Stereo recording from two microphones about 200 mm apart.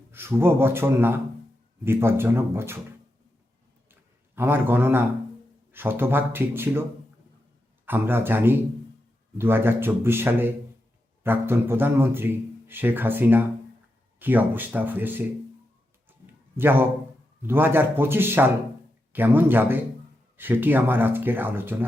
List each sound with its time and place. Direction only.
0.1 s a man's voice: 10° right (ahead or behind)
4.4 s a man's voice: 10° right (ahead or behind)
7.9 s a man's voice: 10° right (ahead or behind)
16.0 s a sound: 10° right (ahead or behind)
17.4 s a man's voice: 10° right (ahead or behind)